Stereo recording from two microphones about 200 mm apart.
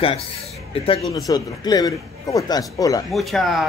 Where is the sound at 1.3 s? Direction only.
20° left (ahead or behind).